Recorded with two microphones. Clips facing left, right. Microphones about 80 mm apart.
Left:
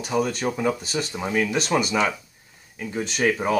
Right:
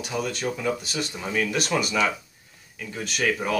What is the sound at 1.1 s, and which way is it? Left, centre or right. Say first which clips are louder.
Speech: left 3 dB; left.